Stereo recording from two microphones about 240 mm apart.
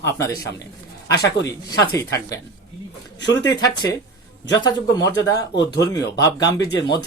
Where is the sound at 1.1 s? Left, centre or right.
Left.